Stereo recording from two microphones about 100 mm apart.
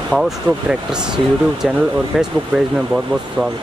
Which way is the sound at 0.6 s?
5° right (ahead or behind).